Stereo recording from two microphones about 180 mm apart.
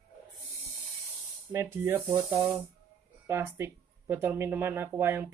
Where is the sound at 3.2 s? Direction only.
15° right (ahead or behind).